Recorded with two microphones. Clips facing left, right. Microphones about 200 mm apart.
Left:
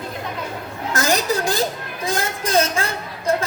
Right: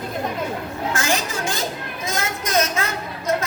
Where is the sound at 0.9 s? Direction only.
40° left (ahead or behind).